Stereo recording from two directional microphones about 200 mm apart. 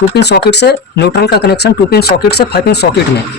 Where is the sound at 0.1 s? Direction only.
55° left (ahead or behind).